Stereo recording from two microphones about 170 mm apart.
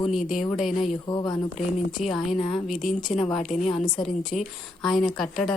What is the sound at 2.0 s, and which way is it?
Speech, 45° left (ahead or behind).